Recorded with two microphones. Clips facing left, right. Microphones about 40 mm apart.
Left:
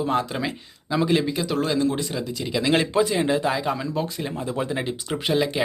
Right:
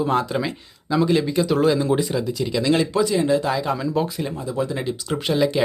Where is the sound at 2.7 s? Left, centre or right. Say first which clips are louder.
Right 1 dB; left.